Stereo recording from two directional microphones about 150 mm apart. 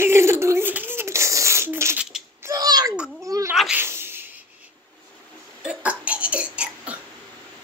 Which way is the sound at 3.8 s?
15° right (ahead or behind).